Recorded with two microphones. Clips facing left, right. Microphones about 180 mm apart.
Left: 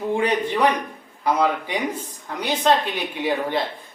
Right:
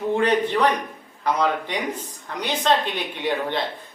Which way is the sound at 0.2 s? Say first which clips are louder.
Right 1 dB; 10° left (ahead or behind).